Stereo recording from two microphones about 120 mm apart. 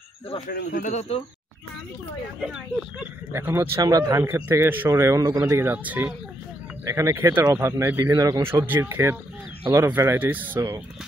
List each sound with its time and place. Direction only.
0.8 s speech: 65° left (ahead or behind)
3.3 s a man's voice: 20° right (ahead or behind)
6.9 s a man's voice: 25° right (ahead or behind)